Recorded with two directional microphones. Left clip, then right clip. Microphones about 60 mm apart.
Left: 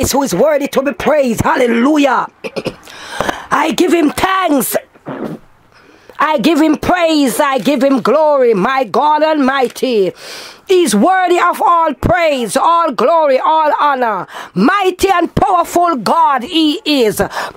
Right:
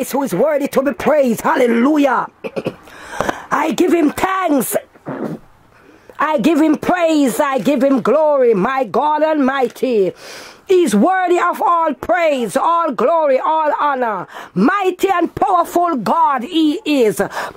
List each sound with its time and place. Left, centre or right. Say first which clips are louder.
0.0 s speech: left 4 dB; centre
0.6 s speech: left 2 dB; centre
1.7 s speech: left 3 dB; centre
4.7 s a sound: left 2 dB; centre
6.1 s speech: left 3 dB; left